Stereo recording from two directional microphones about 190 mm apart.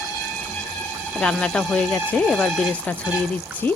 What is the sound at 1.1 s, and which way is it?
Speech, 5° left (ahead or behind).